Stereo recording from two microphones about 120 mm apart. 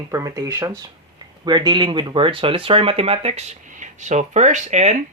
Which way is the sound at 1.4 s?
35° right (ahead or behind).